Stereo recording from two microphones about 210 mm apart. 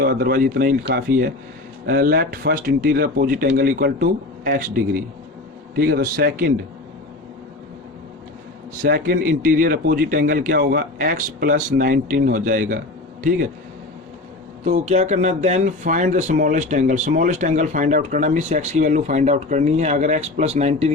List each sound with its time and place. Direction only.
0.0 s speech: 45° right (ahead or behind)
8.8 s speech: 40° right (ahead or behind)
14.6 s speech: 35° right (ahead or behind)